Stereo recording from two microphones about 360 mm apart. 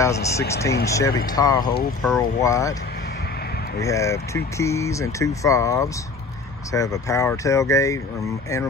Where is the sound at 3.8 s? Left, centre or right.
Centre.